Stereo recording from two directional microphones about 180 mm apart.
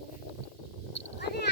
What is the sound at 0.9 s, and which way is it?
Cat, 70° left (ahead or behind).